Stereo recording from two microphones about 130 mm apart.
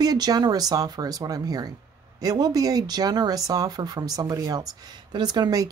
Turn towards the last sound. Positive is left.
turn(degrees=-30)  # may be behind; listen again after turning